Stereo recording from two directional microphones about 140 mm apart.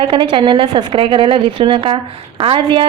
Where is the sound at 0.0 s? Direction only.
35° right (ahead or behind).